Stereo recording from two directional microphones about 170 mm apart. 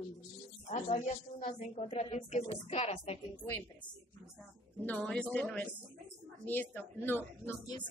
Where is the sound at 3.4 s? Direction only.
10° left (ahead or behind).